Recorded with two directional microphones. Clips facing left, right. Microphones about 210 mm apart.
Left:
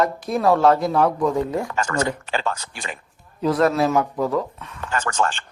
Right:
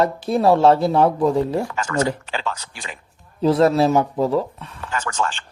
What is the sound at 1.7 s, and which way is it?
Speech, 45° left (ahead or behind).